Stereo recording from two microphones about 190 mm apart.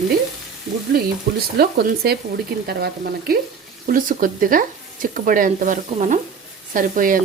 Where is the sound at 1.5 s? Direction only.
55° right (ahead or behind).